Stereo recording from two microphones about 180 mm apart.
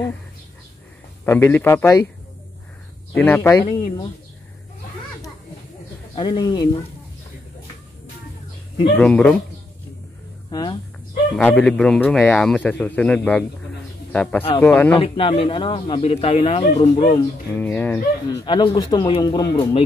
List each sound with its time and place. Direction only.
1.2 s speech: 15° left (ahead or behind)
3.1 s speech: 10° left (ahead or behind)
6.1 s speech: 25° left (ahead or behind)
8.9 s speech: 5° left (ahead or behind)
10.5 s speech: 25° left (ahead or behind)
11.3 s speech: 5° left (ahead or behind)
15.0 s a man's voice: 30° left (ahead or behind)
17.2 s speech: 10° left (ahead or behind)
18.4 s speech: 25° left (ahead or behind)